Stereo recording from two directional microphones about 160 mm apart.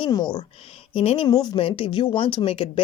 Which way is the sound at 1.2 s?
25° left (ahead or behind).